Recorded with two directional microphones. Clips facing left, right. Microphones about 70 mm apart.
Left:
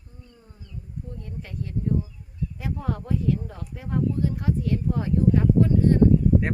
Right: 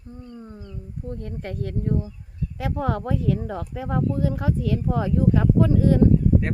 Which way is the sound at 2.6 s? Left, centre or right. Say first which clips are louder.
Right 6 dB; right.